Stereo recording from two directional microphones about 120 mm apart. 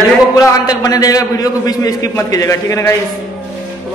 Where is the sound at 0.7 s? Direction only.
30° left (ahead or behind).